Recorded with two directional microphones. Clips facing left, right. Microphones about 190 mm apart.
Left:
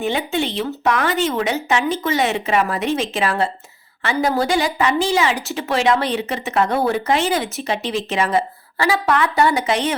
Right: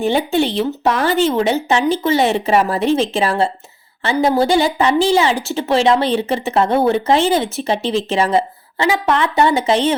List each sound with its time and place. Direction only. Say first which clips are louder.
0.0 s a woman's voice: right 5 dB; 35° right (ahead or behind)